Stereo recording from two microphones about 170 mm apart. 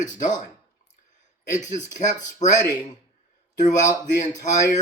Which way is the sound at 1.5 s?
45° left (ahead or behind).